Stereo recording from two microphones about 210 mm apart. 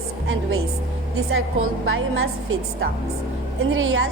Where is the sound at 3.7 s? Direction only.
75° right (ahead or behind).